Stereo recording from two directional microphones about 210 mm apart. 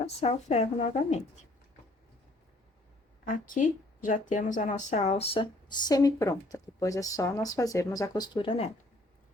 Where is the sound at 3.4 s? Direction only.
40° left (ahead or behind).